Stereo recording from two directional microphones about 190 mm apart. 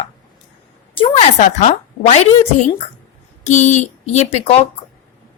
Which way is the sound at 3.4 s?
40° left (ahead or behind).